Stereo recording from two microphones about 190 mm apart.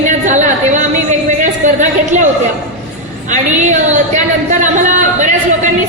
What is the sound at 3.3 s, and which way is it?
A woman's voice, 40° right (ahead or behind).